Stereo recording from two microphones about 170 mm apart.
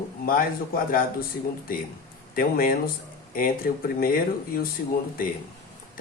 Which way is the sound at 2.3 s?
60° left (ahead or behind).